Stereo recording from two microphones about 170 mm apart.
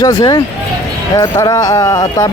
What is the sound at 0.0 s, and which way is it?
Speech, 25° left (ahead or behind).